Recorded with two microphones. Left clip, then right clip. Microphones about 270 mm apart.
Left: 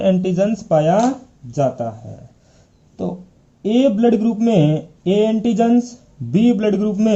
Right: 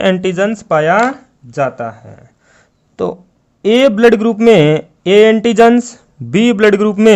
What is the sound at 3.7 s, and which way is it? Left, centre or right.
A man's voice, right.